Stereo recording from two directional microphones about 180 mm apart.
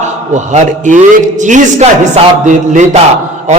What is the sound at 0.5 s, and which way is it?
A man's voice, 45° right (ahead or behind).